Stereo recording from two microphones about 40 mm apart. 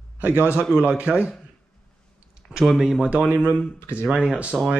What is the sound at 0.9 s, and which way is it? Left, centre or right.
Speech, right.